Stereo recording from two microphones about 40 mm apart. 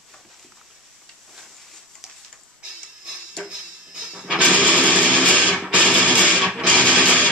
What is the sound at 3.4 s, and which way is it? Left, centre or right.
Music, centre.